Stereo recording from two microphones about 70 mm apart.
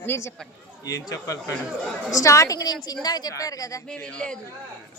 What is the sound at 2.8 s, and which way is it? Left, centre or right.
Speech, left.